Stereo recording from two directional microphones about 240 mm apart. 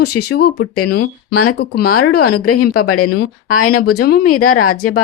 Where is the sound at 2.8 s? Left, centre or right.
Left.